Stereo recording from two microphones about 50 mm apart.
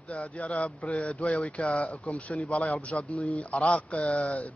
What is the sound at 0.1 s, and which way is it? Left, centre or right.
Speech, left.